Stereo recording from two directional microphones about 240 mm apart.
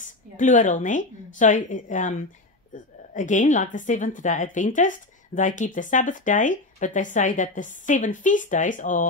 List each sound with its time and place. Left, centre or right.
0.0 s a woman's voice: left